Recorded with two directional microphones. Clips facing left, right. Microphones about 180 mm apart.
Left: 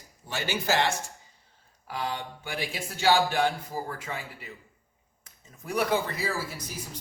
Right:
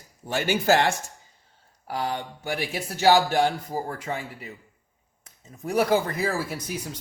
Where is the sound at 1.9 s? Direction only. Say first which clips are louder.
Right 4 dB; 40° right (ahead or behind).